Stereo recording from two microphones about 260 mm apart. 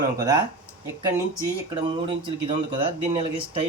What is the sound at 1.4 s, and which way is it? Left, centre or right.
Speech, centre.